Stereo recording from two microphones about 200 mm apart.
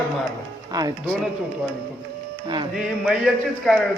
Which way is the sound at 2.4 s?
20° right (ahead or behind).